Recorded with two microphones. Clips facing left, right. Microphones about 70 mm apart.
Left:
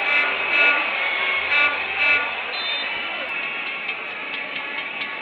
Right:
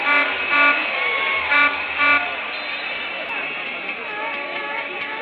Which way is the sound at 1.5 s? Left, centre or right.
Right.